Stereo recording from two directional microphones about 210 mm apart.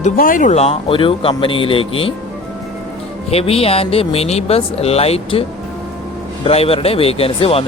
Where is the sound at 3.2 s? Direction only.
30° left (ahead or behind).